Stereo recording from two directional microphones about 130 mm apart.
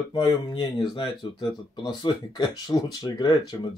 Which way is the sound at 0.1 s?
35° left (ahead or behind).